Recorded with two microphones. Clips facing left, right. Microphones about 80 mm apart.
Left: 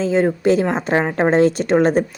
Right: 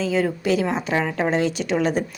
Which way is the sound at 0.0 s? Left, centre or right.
Left.